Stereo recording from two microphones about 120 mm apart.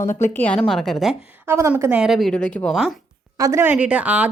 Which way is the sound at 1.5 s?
25° right (ahead or behind).